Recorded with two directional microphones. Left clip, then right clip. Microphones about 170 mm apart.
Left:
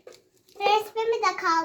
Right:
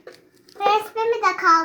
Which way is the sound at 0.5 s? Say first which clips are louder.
Right 3 dB; 20° left (ahead or behind).